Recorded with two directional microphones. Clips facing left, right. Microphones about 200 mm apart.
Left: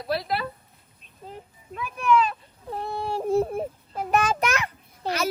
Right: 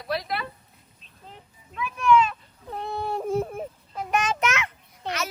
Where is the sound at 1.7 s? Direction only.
35° left (ahead or behind).